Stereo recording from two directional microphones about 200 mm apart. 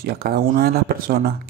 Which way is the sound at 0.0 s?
50° right (ahead or behind).